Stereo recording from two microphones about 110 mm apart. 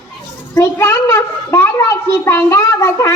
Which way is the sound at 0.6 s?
25° left (ahead or behind).